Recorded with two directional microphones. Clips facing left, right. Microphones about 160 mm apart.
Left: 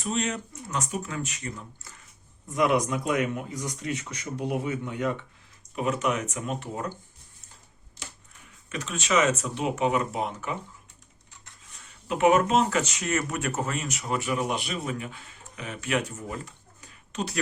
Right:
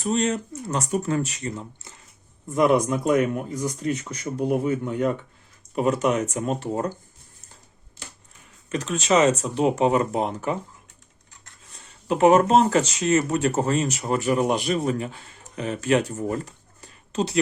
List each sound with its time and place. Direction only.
0.0 s speech: 35° right (ahead or behind)
2.6 s speech: 35° right (ahead or behind)
8.7 s speech: 40° right (ahead or behind)
12.0 s speech: 35° right (ahead or behind)